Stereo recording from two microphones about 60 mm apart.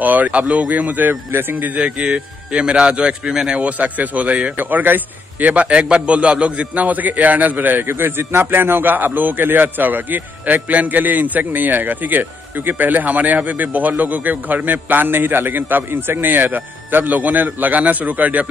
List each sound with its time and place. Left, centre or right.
0.0 s a man's voice: right
1.8 s a man's voice: centre
3.7 s a man's voice: right
4.6 s a man's voice: right